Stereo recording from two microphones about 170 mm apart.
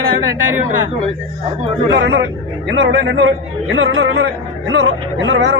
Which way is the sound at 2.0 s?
90° right.